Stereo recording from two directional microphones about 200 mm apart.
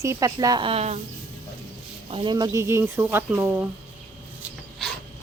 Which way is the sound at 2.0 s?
25° right (ahead or behind).